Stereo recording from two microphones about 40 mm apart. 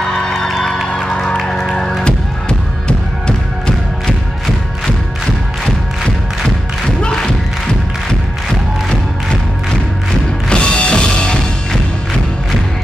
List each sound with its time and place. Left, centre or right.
0.3 s music: centre
1.1 s music: centre
2.9 s music: left
7.0 s thump: centre
10.5 s music: left